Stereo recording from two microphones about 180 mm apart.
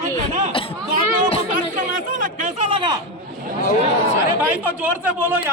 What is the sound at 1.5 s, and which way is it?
Chatter, 50° right (ahead or behind).